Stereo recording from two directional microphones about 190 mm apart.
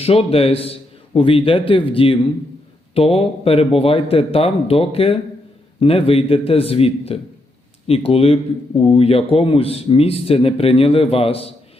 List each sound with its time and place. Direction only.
0.0 s a man's voice: 30° left (ahead or behind)